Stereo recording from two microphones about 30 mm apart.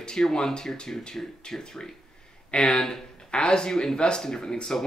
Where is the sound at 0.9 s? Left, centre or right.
Left.